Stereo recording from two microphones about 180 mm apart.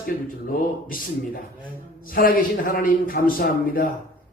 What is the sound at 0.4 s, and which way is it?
Speech, 50° left (ahead or behind).